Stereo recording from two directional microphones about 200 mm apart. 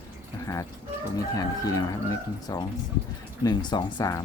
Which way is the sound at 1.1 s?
20° left (ahead or behind).